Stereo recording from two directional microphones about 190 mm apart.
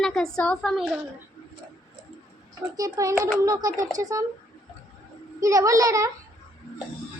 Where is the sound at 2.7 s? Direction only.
20° right (ahead or behind).